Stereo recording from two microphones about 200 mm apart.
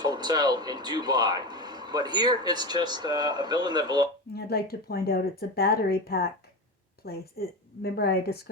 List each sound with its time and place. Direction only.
0.0 s speech: 20° right (ahead or behind)
4.4 s a woman's voice: 50° left (ahead or behind)